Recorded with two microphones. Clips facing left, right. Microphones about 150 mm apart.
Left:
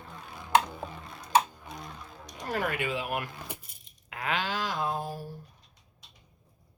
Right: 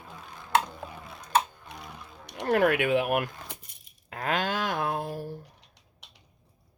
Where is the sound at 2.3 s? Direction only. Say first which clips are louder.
Right 9 dB; 65° right (ahead or behind).